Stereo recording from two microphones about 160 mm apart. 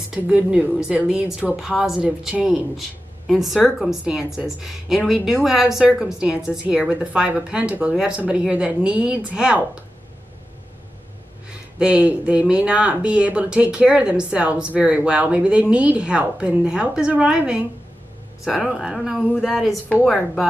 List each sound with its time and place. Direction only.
0.1 s a woman's voice: 5° right (ahead or behind)
11.8 s a woman's voice: 10° right (ahead or behind)